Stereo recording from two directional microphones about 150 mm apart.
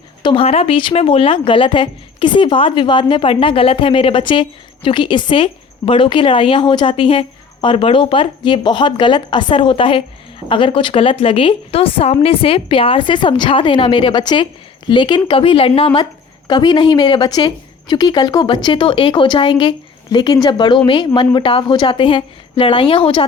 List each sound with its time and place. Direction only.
0.2 s speech: 35° left (ahead or behind)
16.5 s speech: 30° left (ahead or behind)